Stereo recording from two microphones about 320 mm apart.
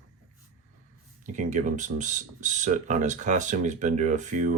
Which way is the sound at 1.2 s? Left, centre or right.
Right.